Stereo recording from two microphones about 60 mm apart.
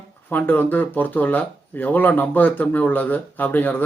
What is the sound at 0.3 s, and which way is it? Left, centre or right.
Speech, left.